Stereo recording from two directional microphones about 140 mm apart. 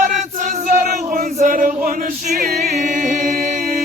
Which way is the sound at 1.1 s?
70° right (ahead or behind).